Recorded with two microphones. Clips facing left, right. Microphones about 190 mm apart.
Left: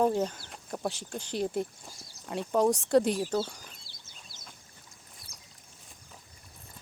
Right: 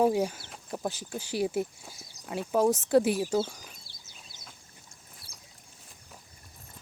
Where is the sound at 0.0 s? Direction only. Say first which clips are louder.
Right 2 dB; 10° right (ahead or behind).